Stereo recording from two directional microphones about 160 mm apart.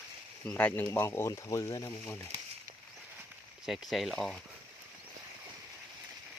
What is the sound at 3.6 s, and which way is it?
Speech, centre (ahead or behind).